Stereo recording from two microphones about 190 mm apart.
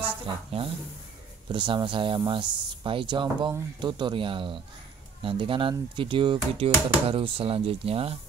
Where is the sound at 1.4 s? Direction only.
25° right (ahead or behind).